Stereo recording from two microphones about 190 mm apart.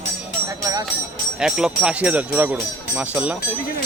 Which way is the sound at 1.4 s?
5° right (ahead or behind).